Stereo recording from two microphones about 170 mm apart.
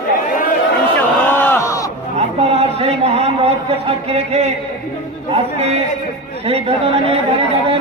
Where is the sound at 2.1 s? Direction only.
35° right (ahead or behind).